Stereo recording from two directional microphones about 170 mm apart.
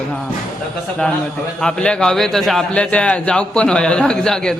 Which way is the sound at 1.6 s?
5° left (ahead or behind).